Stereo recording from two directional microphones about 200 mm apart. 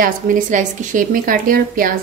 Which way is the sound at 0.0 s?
40° right (ahead or behind).